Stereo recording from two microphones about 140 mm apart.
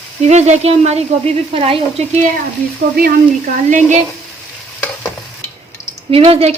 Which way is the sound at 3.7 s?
60° right (ahead or behind).